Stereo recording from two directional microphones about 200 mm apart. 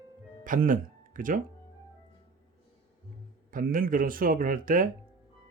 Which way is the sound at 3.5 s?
45° right (ahead or behind).